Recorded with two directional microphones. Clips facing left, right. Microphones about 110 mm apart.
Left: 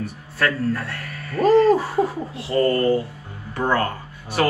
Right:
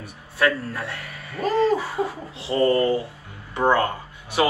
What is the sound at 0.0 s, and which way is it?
A man's voice, 15° right (ahead or behind).